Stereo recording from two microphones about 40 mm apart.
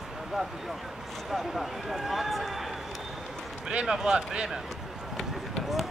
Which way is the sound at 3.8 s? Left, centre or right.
Centre.